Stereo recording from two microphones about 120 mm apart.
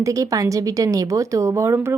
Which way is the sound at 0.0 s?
25° right (ahead or behind).